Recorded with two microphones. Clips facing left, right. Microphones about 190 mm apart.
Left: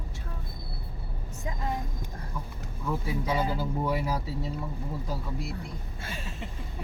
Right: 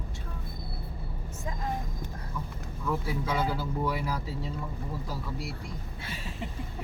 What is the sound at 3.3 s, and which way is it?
Speech, 15° left (ahead or behind).